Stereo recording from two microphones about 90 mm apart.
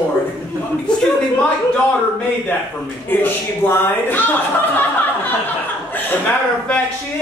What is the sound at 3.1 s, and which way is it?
A woman's voice, 20° left (ahead or behind).